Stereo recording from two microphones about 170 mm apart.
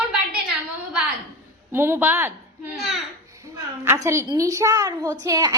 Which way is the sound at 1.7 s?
15° right (ahead or behind).